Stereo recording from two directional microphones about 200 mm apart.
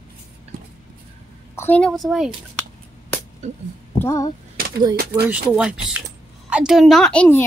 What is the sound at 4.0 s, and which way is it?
Speech, 15° left (ahead or behind).